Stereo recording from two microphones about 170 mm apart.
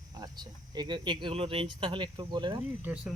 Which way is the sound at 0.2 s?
25° right (ahead or behind).